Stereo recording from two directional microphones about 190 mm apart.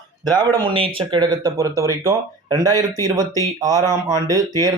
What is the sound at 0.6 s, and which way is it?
Speech, 25° right (ahead or behind).